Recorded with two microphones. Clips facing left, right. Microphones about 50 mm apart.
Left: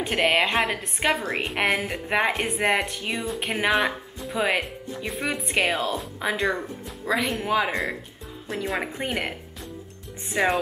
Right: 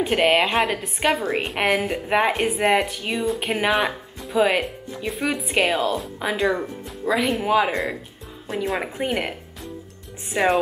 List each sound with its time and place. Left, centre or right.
0.0 s a woman's voice: centre
10.3 s a woman's voice: centre